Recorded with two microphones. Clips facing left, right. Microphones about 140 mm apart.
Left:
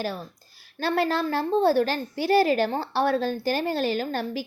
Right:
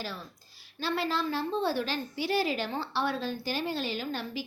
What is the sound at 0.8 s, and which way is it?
A woman's voice, 50° left (ahead or behind).